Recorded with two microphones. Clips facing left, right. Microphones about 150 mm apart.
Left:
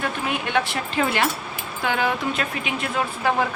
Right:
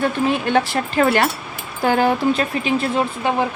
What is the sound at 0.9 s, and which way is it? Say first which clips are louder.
Speech: right 6 dB; 55° right (ahead or behind).